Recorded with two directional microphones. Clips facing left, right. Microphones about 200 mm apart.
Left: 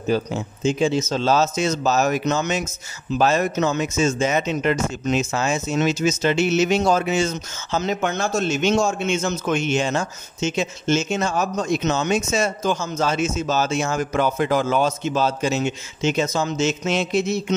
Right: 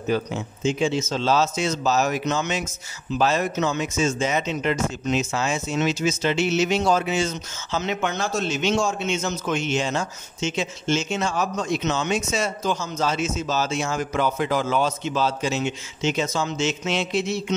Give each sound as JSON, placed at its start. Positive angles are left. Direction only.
{"t": 0.1, "sound": "a man's voice", "side_deg": 35}